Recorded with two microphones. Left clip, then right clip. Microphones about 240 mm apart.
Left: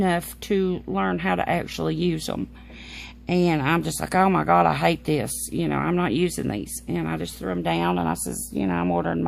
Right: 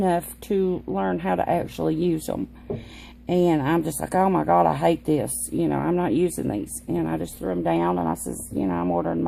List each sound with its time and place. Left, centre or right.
0.0 s speech: left